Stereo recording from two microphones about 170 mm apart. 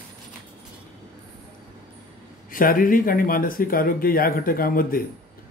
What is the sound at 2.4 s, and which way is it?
Speech, 55° left (ahead or behind).